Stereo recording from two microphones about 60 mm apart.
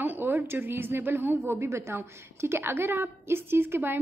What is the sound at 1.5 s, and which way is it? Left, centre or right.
A woman's voice, right.